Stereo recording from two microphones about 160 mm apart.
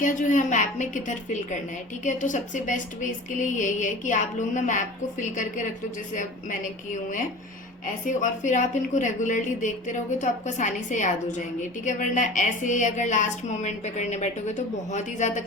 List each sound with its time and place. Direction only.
0.0 s a woman's voice: 55° left (ahead or behind)
8.0 s a woman's voice: 50° left (ahead or behind)